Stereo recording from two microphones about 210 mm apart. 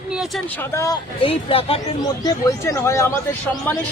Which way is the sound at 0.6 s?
15° left (ahead or behind).